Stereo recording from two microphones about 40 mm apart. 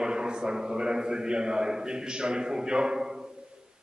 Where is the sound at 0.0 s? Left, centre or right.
Right.